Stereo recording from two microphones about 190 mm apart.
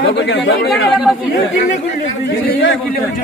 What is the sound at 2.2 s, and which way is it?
Speech, 55° left (ahead or behind).